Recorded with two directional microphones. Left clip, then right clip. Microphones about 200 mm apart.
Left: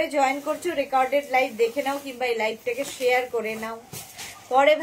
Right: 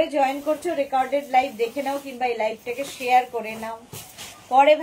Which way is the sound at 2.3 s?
20° left (ahead or behind).